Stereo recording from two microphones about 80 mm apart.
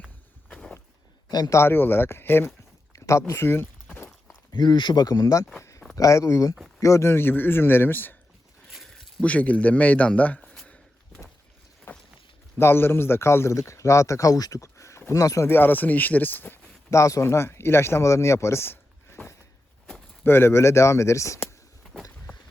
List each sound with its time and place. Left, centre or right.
1.3 s speech: left
1.5 s speech: left
2.9 s speech: left
3.9 s walk: left
4.5 s speech: left
5.5 s a sound: left
6.0 s speech: left
8.7 s a sound: centre
9.2 s speech: centre
11.9 s boat: left
12.5 s speech: left
15.4 s speech: left
16.9 s speech: left